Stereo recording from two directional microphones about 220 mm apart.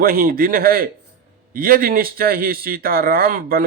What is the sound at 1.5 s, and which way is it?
A man's voice, 40° right (ahead or behind).